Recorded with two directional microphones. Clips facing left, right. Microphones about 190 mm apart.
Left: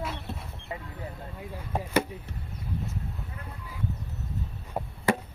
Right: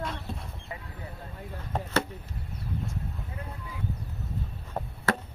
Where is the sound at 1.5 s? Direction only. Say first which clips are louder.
Left 2 dB; 10° left (ahead or behind).